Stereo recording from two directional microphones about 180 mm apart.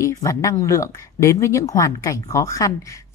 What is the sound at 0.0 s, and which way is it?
Speech, 15° left (ahead or behind).